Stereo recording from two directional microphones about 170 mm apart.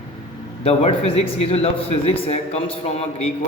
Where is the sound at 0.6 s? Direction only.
35° left (ahead or behind).